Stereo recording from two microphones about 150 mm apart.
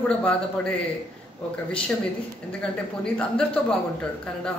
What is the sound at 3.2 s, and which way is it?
Speech, 5° left (ahead or behind).